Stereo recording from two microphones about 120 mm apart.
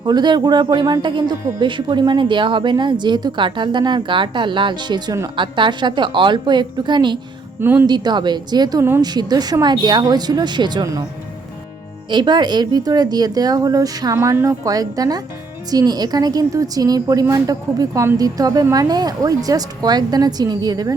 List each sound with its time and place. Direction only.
0.0 s a woman's voice: 35° right (ahead or behind)
7.6 s speech: 20° right (ahead or behind)
7.9 s a woman's voice: 35° right (ahead or behind)
12.1 s a woman's voice: 40° right (ahead or behind)